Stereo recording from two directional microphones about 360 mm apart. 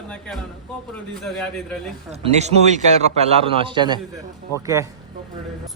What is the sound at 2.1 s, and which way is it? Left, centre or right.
A man's voice, centre.